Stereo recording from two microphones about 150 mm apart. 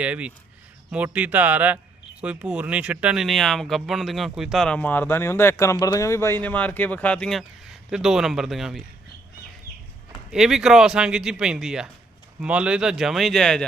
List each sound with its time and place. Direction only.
0.0 s speech: 10° right (ahead or behind)
10.3 s speech: centre (ahead or behind)